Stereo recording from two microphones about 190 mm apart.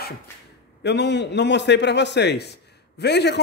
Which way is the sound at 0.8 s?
65° left (ahead or behind).